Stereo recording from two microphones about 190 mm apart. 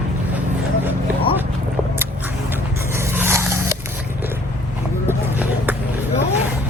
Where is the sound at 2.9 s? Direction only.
15° right (ahead or behind).